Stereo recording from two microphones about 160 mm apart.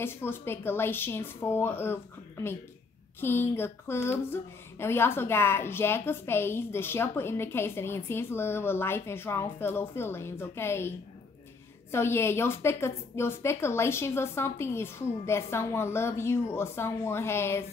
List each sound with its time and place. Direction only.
0.0 s a woman's voice: 15° left (ahead or behind)